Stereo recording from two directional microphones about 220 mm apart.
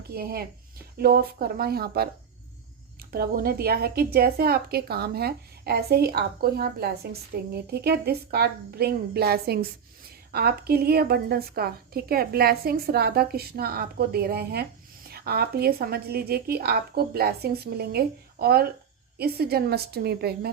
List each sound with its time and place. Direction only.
0.1 s a woman's voice: 45° right (ahead or behind)